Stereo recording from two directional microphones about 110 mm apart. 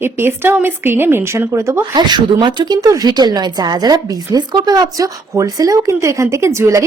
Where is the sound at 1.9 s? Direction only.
40° right (ahead or behind).